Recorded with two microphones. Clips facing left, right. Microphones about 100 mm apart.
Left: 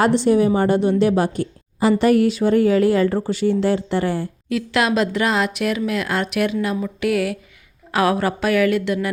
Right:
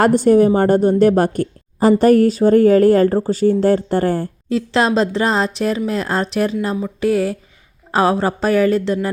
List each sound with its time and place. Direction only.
0.0 s a woman's voice: 45° right (ahead or behind)
4.4 s speech: 30° right (ahead or behind)